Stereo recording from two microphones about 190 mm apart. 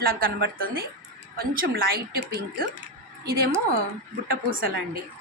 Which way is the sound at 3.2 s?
55° right (ahead or behind).